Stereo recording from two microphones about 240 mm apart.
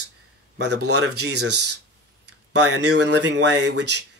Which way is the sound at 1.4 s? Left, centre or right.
Right.